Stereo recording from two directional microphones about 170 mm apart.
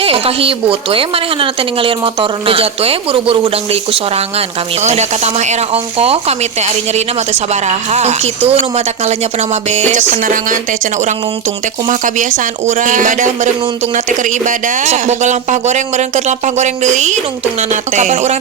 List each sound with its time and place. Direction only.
0.0 s a woman's voice: 35° right (ahead or behind)